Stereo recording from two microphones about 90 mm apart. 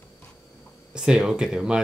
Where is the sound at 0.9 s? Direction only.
10° right (ahead or behind).